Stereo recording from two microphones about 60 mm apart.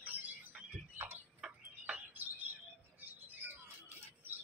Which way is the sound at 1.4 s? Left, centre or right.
Centre.